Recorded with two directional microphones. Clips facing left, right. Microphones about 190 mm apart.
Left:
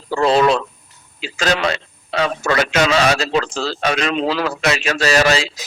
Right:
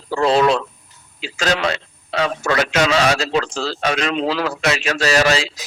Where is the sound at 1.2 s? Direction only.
Centre (ahead or behind).